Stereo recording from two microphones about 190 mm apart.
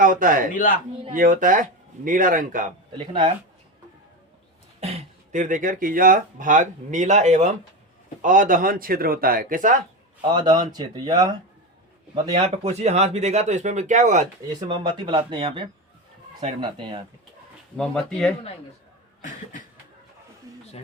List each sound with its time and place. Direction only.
0.0 s a man's voice: 45° right (ahead or behind)
0.5 s a man's voice: 45° left (ahead or behind)
1.1 s speech: 45° right (ahead or behind)
3.0 s speech: 25° right (ahead or behind)
4.8 s speech: 35° right (ahead or behind)
10.3 s speech: 20° right (ahead or behind)
12.3 s speech: 35° right (ahead or behind)
14.6 s speech: 25° right (ahead or behind)
17.7 s speech: 5° left (ahead or behind)